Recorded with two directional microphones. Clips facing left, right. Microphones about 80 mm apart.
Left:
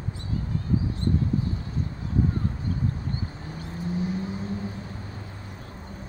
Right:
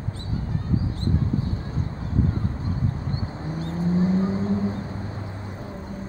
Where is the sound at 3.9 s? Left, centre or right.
Right.